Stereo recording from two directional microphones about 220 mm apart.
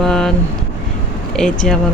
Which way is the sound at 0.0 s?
Centre (ahead or behind).